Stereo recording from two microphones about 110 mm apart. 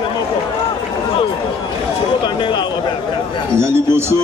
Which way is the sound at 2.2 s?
45° left (ahead or behind).